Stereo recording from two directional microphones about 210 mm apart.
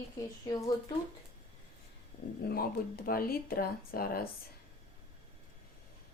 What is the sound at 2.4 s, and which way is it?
Speech, 45° left (ahead or behind).